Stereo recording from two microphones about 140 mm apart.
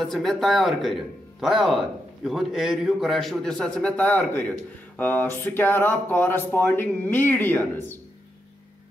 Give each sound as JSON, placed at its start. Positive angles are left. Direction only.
{"t": 0.0, "sound": "speech", "side_deg": 0}